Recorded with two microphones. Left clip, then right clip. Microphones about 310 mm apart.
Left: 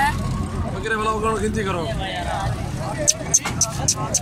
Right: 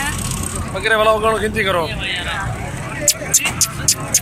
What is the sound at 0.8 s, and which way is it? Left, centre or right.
Speech, centre.